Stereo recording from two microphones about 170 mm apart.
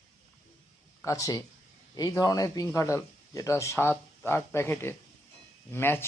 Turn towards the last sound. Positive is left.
turn(degrees=15)  # may be behind; listen again after turning